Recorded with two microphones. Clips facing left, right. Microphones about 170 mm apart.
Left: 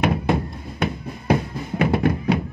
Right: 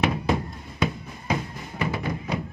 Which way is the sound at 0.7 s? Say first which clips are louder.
Left 1 dB; 60° left (ahead or behind).